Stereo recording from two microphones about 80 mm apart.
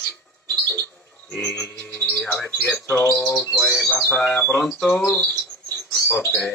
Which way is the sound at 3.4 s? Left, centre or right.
Left.